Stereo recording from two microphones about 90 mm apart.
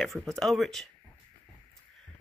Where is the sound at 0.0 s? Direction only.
Centre (ahead or behind).